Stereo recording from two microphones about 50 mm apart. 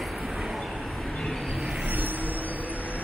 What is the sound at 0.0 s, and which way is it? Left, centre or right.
Vehicle, centre.